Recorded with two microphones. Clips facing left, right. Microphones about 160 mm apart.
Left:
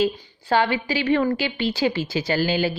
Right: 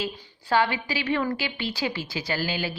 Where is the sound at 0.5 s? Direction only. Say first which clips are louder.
Left 3 dB; 25° left (ahead or behind).